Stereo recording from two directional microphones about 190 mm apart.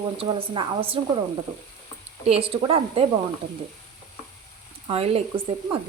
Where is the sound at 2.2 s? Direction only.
30° right (ahead or behind).